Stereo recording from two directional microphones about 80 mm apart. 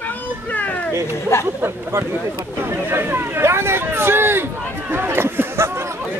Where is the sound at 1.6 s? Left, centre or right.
Right.